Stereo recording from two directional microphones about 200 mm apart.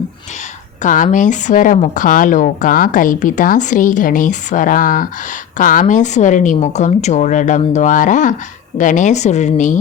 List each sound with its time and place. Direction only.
0.8 s speech: 40° left (ahead or behind)